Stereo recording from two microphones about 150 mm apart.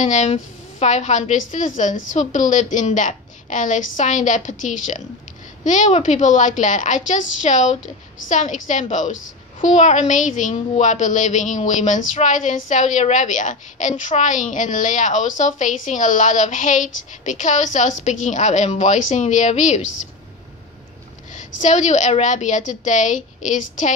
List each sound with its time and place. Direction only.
0.0 s a woman's voice: 50° left (ahead or behind)
21.3 s a woman's voice: 55° left (ahead or behind)